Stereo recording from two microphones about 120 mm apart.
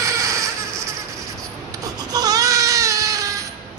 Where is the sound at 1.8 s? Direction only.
30° right (ahead or behind).